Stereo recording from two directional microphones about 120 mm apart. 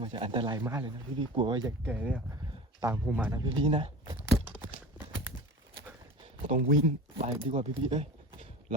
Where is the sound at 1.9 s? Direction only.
10° right (ahead or behind).